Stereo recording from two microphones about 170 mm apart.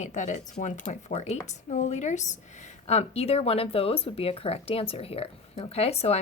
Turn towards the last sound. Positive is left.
turn(degrees=40)  # may be behind; listen again after turning